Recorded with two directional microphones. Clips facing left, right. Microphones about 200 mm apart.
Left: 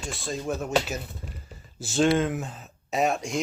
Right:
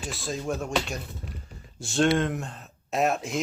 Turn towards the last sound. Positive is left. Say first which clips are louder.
# even
turn(degrees=0)  # may be behind; listen again after turning